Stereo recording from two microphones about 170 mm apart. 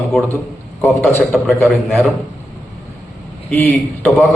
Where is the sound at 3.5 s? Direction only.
10° left (ahead or behind).